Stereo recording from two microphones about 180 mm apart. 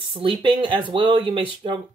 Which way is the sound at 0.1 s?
30° right (ahead or behind).